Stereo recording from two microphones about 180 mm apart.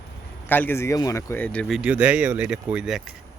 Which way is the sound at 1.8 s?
5° right (ahead or behind).